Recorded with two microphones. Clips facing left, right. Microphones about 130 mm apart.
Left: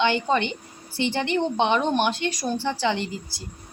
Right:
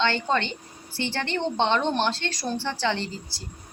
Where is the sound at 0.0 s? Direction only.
15° left (ahead or behind).